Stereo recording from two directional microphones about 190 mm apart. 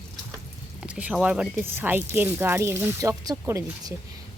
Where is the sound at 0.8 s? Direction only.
5° right (ahead or behind).